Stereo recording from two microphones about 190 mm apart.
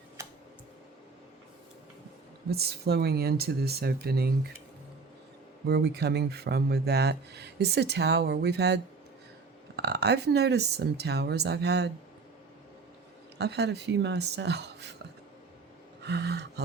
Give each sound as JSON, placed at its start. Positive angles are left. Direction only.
{"t": 2.5, "sound": "speech", "side_deg": -55}
{"t": 5.6, "sound": "speech", "side_deg": -60}
{"t": 13.4, "sound": "speech", "side_deg": -60}
{"t": 16.0, "sound": "speech", "side_deg": -60}